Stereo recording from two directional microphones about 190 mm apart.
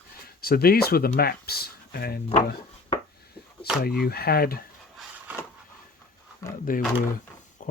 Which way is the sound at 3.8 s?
55° left (ahead or behind).